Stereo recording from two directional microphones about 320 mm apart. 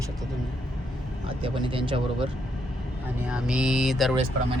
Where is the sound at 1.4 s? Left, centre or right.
Centre.